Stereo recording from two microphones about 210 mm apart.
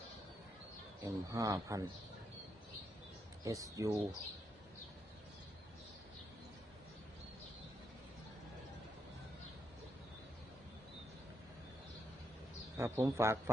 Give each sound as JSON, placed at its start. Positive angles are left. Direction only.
{"t": 1.0, "sound": "speech", "side_deg": -15}
{"t": 3.4, "sound": "speech", "side_deg": -15}
{"t": 12.7, "sound": "speech", "side_deg": -15}